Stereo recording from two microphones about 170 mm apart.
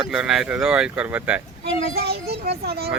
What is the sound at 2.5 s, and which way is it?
Speech, 70° right (ahead or behind).